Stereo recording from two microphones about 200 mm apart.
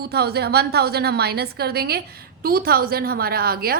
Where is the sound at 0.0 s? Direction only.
55° right (ahead or behind).